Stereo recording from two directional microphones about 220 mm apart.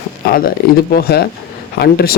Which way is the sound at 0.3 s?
40° left (ahead or behind).